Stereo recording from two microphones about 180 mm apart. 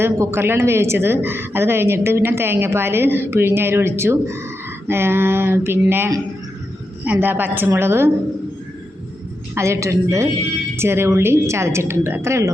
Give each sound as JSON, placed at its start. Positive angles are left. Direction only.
{"t": 0.0, "sound": "a woman's voice", "side_deg": -15}
{"t": 9.6, "sound": "a woman's voice", "side_deg": -15}